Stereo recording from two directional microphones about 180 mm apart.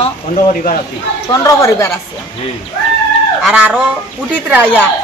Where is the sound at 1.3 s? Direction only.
20° left (ahead or behind).